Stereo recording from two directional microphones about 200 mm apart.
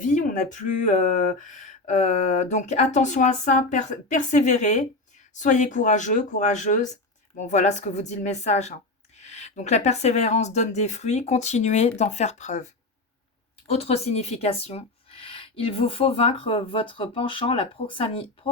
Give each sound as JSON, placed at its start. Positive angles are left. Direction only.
{"t": 0.0, "sound": "speech", "side_deg": 40}
{"t": 13.7, "sound": "speech", "side_deg": 30}